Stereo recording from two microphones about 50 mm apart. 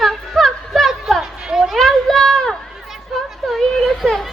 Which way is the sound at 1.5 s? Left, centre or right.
Centre.